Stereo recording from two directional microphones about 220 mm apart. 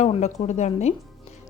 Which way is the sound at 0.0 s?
30° left (ahead or behind).